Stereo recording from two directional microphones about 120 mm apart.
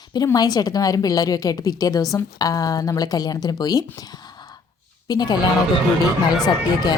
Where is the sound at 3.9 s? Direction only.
35° left (ahead or behind).